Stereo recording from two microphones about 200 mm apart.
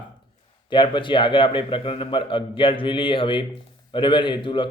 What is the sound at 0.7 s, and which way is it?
A man's voice, 25° left (ahead or behind).